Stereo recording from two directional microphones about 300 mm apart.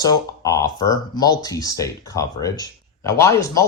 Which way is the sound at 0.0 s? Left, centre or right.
Centre.